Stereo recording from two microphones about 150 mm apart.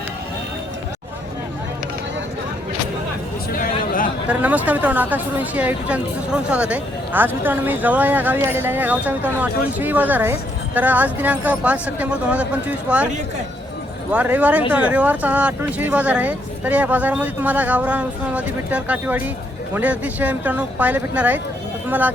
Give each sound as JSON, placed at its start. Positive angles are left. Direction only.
{"t": 3.5, "sound": "a sound", "side_deg": 65}
{"t": 4.3, "sound": "speech", "side_deg": -10}
{"t": 14.1, "sound": "speech", "side_deg": -10}